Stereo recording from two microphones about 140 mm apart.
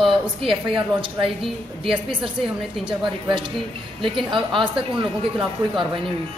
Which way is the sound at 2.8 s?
35° right (ahead or behind).